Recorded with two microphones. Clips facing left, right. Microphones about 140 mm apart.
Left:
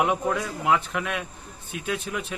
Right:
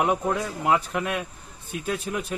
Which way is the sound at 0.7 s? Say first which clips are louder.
Right 1 dB; 40° right (ahead or behind).